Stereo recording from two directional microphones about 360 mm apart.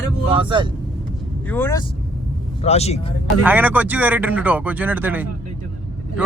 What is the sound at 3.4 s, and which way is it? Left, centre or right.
A man's voice, centre.